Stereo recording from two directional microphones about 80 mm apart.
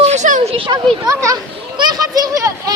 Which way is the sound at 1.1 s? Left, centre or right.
Right.